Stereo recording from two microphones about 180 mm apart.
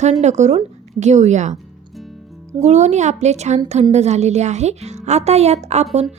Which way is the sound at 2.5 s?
40° right (ahead or behind).